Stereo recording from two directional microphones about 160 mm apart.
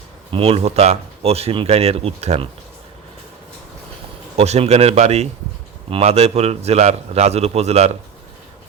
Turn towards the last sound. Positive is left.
turn(degrees=-40)  # may be behind; listen again after turning